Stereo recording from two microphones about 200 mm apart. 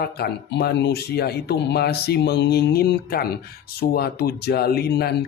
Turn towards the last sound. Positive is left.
turn(degrees=55)  # may be behind; listen again after turning